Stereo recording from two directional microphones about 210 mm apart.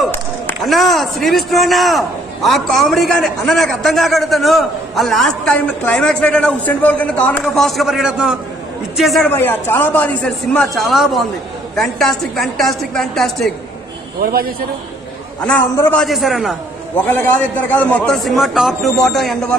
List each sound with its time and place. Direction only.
0.1 s a man's voice: 5° left (ahead or behind)
14.2 s a man's voice: 45° right (ahead or behind)
16.0 s a man's voice: centre (ahead or behind)